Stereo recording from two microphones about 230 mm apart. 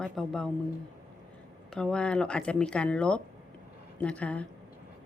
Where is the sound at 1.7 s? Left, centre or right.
Centre.